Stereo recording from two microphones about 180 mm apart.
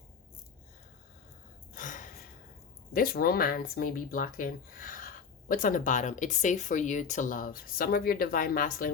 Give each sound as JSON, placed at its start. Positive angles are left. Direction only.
{"t": 1.7, "sound": "gasp", "side_deg": 45}
{"t": 2.9, "sound": "speech", "side_deg": 55}